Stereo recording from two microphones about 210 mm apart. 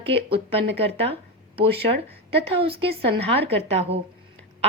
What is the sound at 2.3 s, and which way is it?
Speech, 25° right (ahead or behind).